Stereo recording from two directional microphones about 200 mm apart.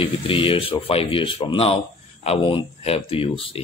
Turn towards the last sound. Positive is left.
turn(degrees=25)  # may be behind; listen again after turning